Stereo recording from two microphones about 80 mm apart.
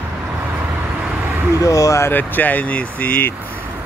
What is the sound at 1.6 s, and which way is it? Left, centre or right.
Speech, left.